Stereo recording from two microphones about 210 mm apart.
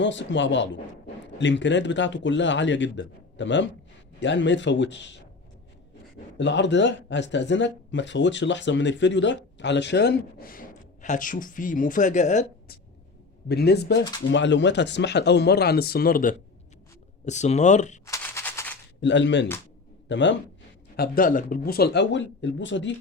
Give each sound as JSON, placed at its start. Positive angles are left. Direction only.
{"t": 0.0, "sound": "speech", "side_deg": 60}
{"t": 6.3, "sound": "speech", "side_deg": 60}
{"t": 13.5, "sound": "speech", "side_deg": 50}
{"t": 17.2, "sound": "speech", "side_deg": 35}
{"t": 18.0, "sound": "gunshot", "side_deg": 15}
{"t": 19.0, "sound": "speech", "side_deg": 60}
{"t": 20.9, "sound": "speech", "side_deg": 45}